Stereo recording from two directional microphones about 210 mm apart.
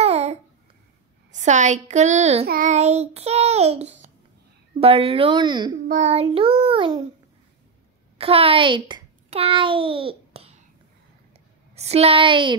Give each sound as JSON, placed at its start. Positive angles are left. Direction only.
{"t": 0.0, "sound": "babbling", "side_deg": -30}
{"t": 1.3, "sound": "child singing", "side_deg": -35}
{"t": 2.4, "sound": "child singing", "side_deg": -45}
{"t": 4.7, "sound": "child singing", "side_deg": -25}
{"t": 5.9, "sound": "child singing", "side_deg": -35}
{"t": 8.2, "sound": "a child's voice", "side_deg": -25}
{"t": 11.7, "sound": "child singing", "side_deg": -30}